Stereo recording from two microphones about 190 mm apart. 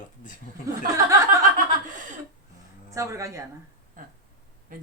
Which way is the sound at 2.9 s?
15° right (ahead or behind).